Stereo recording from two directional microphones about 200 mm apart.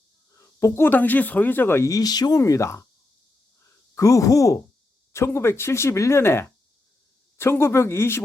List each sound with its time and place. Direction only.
0.3 s speech: 15° left (ahead or behind)
3.9 s speech: 15° left (ahead or behind)